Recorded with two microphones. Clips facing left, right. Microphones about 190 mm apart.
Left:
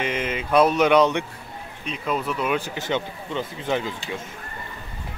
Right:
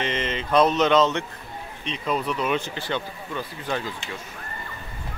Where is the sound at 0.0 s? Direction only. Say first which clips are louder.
Left 1 dB; 10° left (ahead or behind).